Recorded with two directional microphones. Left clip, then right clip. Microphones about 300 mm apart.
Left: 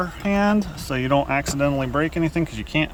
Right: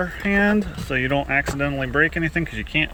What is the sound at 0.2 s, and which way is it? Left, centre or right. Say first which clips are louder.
Speech: right 2 dB; centre.